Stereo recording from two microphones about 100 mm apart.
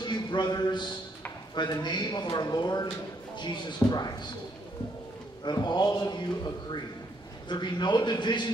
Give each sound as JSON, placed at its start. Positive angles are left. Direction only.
{"t": 0.0, "sound": "a man's voice", "side_deg": 50}
{"t": 5.4, "sound": "a man's voice", "side_deg": 45}